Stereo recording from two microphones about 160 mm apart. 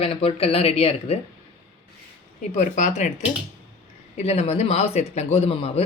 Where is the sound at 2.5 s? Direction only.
50° left (ahead or behind).